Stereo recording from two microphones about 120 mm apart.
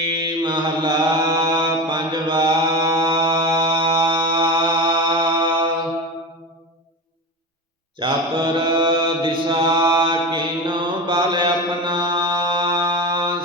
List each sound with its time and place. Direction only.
0.0 s mantra: 40° right (ahead or behind)
3.6 s music: 45° right (ahead or behind)
7.9 s mantra: 45° right (ahead or behind)